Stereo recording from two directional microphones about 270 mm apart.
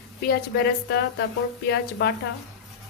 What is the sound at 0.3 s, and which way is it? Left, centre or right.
A woman's voice, left.